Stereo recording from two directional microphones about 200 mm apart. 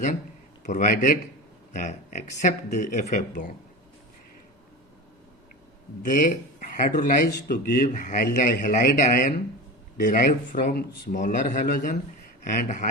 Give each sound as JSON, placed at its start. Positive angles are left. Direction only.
{"t": 0.6, "sound": "speech", "side_deg": 40}
{"t": 6.0, "sound": "a man's voice", "side_deg": 40}